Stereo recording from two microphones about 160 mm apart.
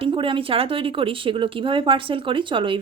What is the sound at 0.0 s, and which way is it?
Speech, 35° right (ahead or behind).